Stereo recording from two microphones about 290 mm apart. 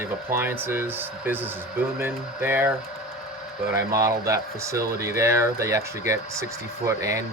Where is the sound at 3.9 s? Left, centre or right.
Centre.